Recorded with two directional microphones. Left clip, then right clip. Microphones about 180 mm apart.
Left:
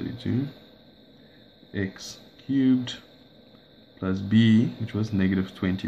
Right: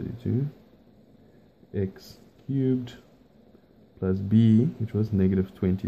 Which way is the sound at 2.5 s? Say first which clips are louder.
Left 4 dB; 45° right (ahead or behind).